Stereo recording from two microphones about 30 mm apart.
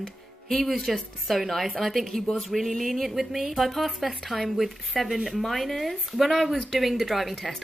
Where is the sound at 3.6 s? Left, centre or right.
Centre.